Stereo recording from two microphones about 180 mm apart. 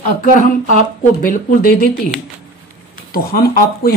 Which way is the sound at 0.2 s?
45° left (ahead or behind).